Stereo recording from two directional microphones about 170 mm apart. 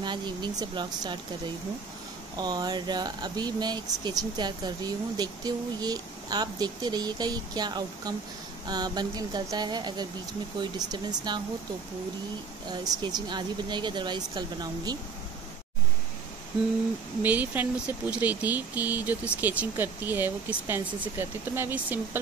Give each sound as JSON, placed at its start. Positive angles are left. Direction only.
{"t": 0.0, "sound": "speech", "side_deg": -25}
{"t": 2.3, "sound": "speech", "side_deg": -25}
{"t": 12.8, "sound": "speech", "side_deg": -25}
{"t": 17.2, "sound": "speech", "side_deg": -10}